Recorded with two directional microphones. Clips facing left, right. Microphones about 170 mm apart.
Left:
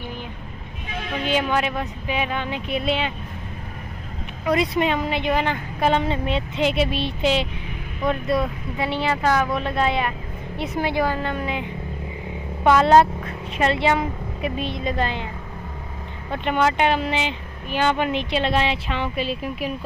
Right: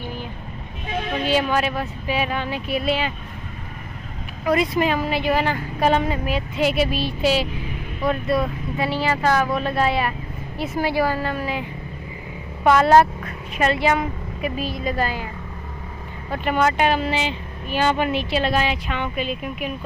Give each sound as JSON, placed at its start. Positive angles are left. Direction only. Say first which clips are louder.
{"t": 1.2, "sound": "speech", "louder": "right 1 dB", "side_deg": 20}
{"t": 4.5, "sound": "speech", "louder": "right 1 dB", "side_deg": 25}
{"t": 8.0, "sound": "speech", "louder": "right 1 dB", "side_deg": 0}
{"t": 8.7, "sound": "speech", "louder": "right 1 dB", "side_deg": 20}
{"t": 12.7, "sound": "speech", "louder": "even", "side_deg": 20}
{"t": 16.3, "sound": "speech", "louder": "right 1 dB", "side_deg": 20}